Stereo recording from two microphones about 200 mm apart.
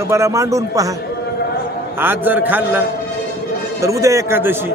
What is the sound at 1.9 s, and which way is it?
Speech, 10° right (ahead or behind).